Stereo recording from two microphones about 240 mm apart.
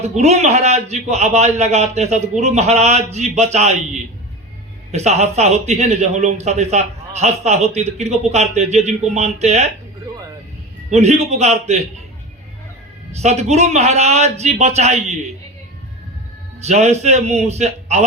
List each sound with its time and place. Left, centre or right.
0.0 s a man's voice: right
10.9 s a man's voice: right
13.1 s a man's voice: right
16.6 s a man's voice: right